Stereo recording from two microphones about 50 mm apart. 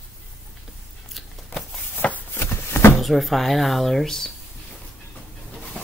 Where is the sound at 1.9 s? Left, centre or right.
Left.